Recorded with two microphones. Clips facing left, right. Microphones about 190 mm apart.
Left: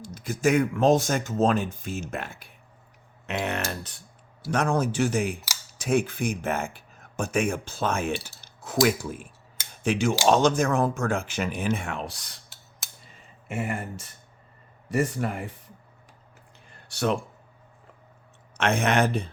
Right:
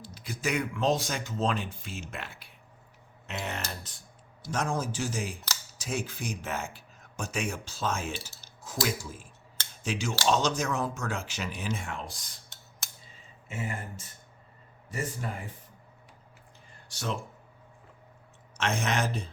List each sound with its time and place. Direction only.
0.0 s speech: 45° left (ahead or behind)
3.2 s speech: 65° left (ahead or behind)
13.5 s a man's voice: 65° left (ahead or behind)
16.9 s speech: 65° left (ahead or behind)
18.5 s speech: 60° left (ahead or behind)